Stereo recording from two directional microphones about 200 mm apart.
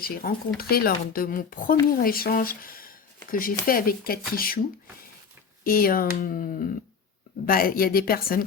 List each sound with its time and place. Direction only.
0.0 s a woman's voice: 50° left (ahead or behind)
5.6 s a woman's voice: 45° left (ahead or behind)